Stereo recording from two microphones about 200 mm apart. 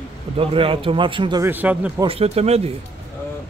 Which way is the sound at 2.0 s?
30° right (ahead or behind).